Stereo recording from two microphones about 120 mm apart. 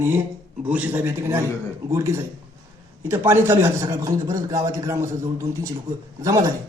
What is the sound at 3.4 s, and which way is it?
A man's voice, 20° right (ahead or behind).